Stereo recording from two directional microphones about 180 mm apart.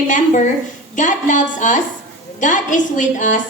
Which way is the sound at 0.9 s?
45° left (ahead or behind).